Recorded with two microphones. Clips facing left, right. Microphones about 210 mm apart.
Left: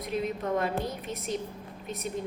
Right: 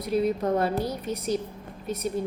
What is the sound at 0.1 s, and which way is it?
Speech, 35° right (ahead or behind).